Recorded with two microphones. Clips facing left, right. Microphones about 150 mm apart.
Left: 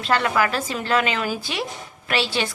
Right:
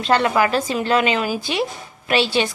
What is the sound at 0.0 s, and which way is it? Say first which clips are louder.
A woman's voice: right 4 dB; 20° right (ahead or behind).